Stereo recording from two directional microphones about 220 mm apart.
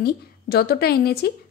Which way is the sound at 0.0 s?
45° left (ahead or behind).